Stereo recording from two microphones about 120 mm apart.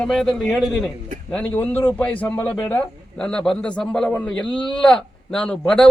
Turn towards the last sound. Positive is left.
turn(degrees=5)  # may be behind; listen again after turning